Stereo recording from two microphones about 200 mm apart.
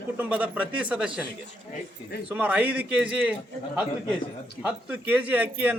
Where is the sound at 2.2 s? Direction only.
5° right (ahead or behind).